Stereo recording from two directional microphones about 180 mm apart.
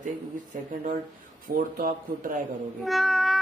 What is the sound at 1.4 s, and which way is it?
Speech, 50° right (ahead or behind).